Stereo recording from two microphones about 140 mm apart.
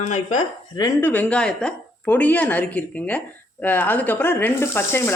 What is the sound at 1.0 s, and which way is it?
A woman's voice, 10° left (ahead or behind).